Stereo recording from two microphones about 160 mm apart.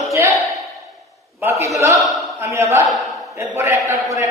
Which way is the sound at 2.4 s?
20° right (ahead or behind).